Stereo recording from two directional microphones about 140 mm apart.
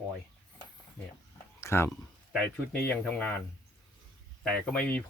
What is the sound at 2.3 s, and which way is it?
Speech, 10° left (ahead or behind).